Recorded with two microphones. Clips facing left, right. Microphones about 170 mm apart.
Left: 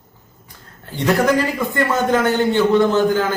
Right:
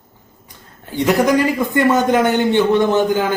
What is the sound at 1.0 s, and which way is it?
A man's voice, 15° right (ahead or behind).